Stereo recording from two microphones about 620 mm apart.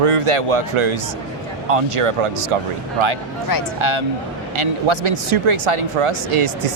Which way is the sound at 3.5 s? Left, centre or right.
Left.